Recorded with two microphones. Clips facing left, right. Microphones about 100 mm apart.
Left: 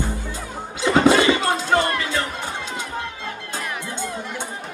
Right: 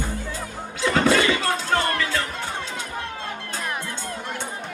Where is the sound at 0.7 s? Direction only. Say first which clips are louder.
Left 4 dB; 20° left (ahead or behind).